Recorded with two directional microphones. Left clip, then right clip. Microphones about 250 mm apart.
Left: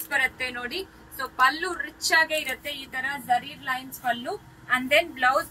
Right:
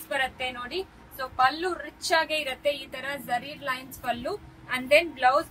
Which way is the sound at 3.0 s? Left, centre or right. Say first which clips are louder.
Left 5 dB; right.